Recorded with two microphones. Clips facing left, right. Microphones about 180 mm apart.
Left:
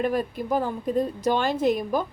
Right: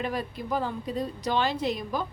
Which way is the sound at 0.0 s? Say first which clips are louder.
Left 6 dB; 50° left (ahead or behind).